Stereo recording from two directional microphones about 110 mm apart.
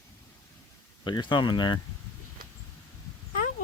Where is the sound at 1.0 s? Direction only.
45° left (ahead or behind).